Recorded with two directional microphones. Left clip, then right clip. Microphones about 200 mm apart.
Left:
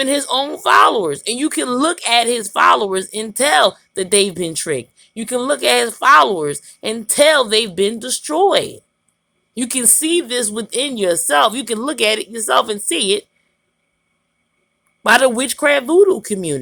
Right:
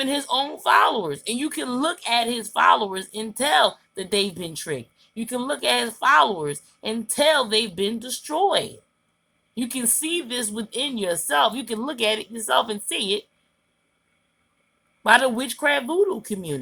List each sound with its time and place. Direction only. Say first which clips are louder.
0.0 s speech: left 6 dB; 40° left (ahead or behind)
15.0 s speech: left 5 dB; 45° left (ahead or behind)